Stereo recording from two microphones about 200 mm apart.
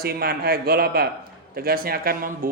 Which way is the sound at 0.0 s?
50° right (ahead or behind).